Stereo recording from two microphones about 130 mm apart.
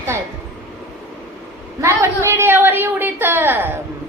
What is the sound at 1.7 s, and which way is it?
A woman's voice, 20° right (ahead or behind).